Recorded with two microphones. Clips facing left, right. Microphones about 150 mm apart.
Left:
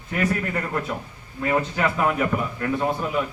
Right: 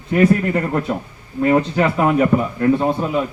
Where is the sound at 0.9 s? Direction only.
40° right (ahead or behind).